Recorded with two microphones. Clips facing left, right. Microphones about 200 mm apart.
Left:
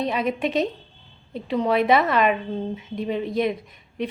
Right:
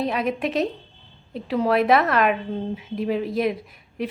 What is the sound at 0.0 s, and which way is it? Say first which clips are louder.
A woman's voice: even; centre (ahead or behind).